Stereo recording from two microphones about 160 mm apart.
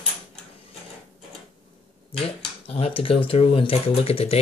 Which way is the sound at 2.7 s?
40° left (ahead or behind).